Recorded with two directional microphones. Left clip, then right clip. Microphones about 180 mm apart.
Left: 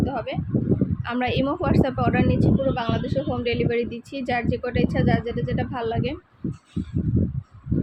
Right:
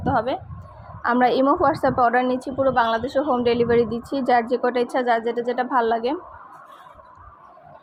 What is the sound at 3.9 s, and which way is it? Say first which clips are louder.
Speech: right 7 dB; 5° right (ahead or behind).